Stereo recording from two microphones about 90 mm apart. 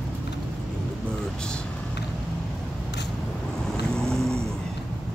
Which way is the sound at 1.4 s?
10° left (ahead or behind).